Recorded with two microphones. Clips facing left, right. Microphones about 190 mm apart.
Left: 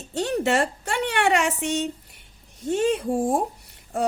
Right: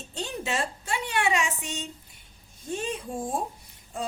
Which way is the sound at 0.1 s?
75° left (ahead or behind).